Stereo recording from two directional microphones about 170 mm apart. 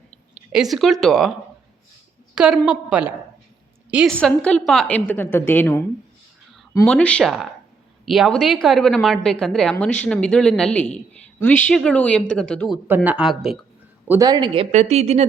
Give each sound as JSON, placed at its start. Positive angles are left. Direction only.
{"t": 0.5, "sound": "a woman's voice", "side_deg": 0}
{"t": 2.3, "sound": "a woman's voice", "side_deg": -5}
{"t": 6.8, "sound": "a woman's voice", "side_deg": 5}
{"t": 14.1, "sound": "speech", "side_deg": -20}